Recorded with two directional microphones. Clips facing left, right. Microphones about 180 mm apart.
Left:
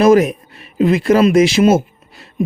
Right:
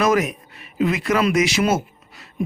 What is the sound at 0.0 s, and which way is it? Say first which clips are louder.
Speech: left 8 dB; 30° left (ahead or behind).